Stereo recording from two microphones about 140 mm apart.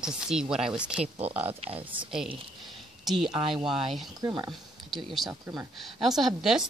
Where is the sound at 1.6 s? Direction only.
40° right (ahead or behind).